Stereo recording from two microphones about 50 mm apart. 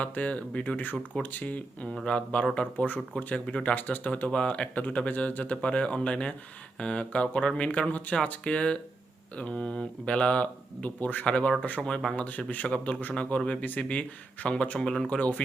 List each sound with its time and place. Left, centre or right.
0.0 s speech: left
3.8 s speech: left
4.3 s speech: left
11.3 s speech: left
12.1 s speech: left
14.8 s speech: centre